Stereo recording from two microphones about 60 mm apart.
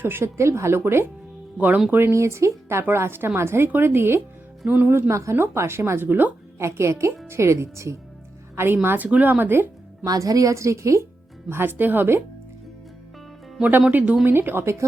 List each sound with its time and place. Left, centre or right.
0.0 s speech: right
0.3 s a woman's voice: right
1.5 s speech: right
1.9 s speech: right
2.1 s a woman's voice: right
4.6 s speech: right
4.9 s a woman's voice: right
6.6 s a woman's voice: right
8.5 s speech: right
9.0 s speech: right
9.4 s speech: right
10.0 s a woman's voice: right
11.4 s speech: right
13.6 s speech: right